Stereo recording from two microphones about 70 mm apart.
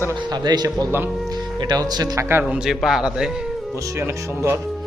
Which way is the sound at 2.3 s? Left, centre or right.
Right.